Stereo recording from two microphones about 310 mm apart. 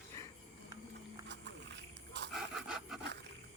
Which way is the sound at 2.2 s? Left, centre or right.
Right.